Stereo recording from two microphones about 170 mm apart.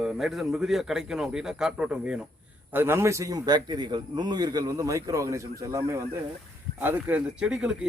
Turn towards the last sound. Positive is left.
turn(degrees=-5)  # may be behind; listen again after turning